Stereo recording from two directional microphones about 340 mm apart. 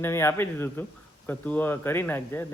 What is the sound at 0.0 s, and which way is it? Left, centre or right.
Speech, centre.